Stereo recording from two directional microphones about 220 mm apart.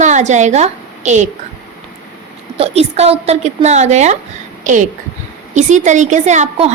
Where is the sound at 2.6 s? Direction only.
25° right (ahead or behind).